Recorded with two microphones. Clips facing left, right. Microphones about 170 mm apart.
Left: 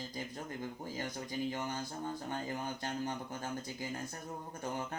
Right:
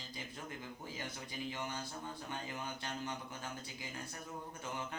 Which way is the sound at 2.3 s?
45° left (ahead or behind).